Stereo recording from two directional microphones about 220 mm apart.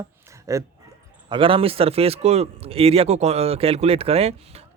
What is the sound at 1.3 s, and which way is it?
Speech, 25° right (ahead or behind).